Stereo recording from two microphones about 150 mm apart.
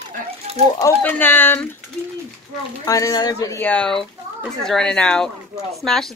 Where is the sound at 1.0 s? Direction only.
10° left (ahead or behind).